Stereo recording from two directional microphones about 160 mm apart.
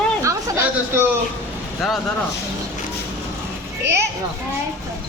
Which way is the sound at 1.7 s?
Centre (ahead or behind).